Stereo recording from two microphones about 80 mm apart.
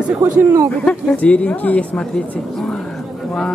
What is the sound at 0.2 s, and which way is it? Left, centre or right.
Speech, right.